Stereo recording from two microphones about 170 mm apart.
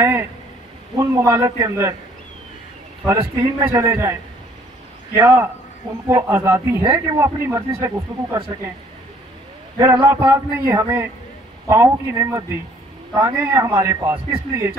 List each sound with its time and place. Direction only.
0.0 s speech: 15° right (ahead or behind)
3.1 s speech: 20° right (ahead or behind)
9.8 s speech: 15° right (ahead or behind)